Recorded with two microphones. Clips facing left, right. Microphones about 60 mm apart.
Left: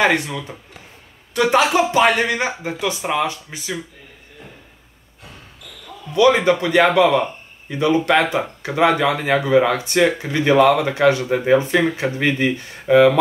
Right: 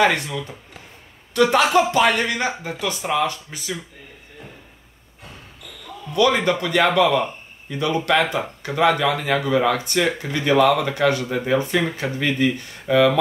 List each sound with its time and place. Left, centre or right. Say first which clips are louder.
0.0 s speech: left 1 dB; centre
6.1 s speech: left 4 dB; left